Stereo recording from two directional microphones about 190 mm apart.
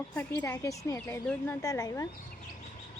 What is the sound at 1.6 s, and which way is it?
Speech, 20° left (ahead or behind).